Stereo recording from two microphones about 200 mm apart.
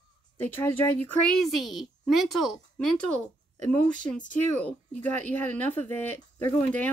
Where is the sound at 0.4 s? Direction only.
10° left (ahead or behind).